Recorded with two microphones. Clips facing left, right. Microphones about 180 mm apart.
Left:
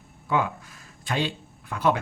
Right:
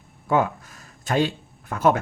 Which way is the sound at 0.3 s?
45° right (ahead or behind).